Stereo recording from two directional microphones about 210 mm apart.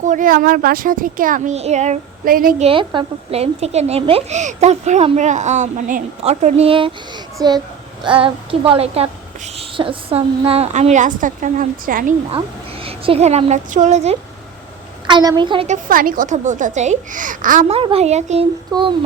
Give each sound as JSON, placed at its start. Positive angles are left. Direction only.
{"t": 0.0, "sound": "speech", "side_deg": -40}
{"t": 2.6, "sound": "a child's voice", "side_deg": -25}
{"t": 12.8, "sound": "speech", "side_deg": -30}
{"t": 15.0, "sound": "speech", "side_deg": -20}
{"t": 15.6, "sound": "speech", "side_deg": -40}
{"t": 17.7, "sound": "speech", "side_deg": -25}